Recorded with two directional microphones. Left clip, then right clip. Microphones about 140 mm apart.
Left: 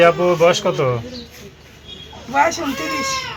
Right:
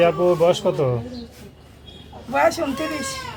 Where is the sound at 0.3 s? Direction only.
15° right (ahead or behind).